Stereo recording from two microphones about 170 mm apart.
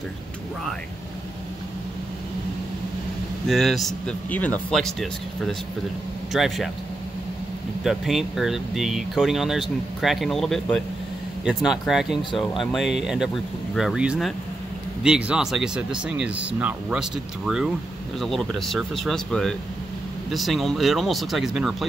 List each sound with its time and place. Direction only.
3.4 s speech: centre (ahead or behind)
6.3 s speech: centre (ahead or behind)
7.8 s speech: centre (ahead or behind)